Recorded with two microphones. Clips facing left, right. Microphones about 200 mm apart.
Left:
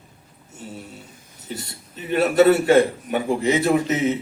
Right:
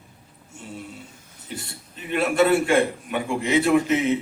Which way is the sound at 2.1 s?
40° left (ahead or behind).